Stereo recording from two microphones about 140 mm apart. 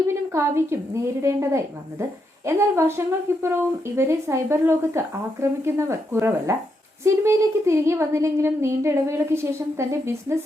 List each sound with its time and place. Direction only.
0.3 s a woman's voice: 20° right (ahead or behind)